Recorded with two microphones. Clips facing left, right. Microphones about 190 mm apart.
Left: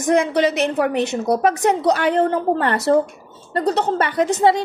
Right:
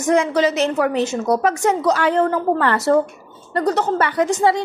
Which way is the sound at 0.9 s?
60° left (ahead or behind).